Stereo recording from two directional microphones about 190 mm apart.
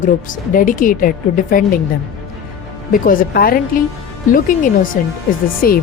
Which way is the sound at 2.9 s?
45° left (ahead or behind).